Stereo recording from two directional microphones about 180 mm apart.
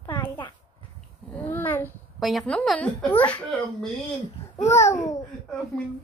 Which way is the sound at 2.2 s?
Centre (ahead or behind).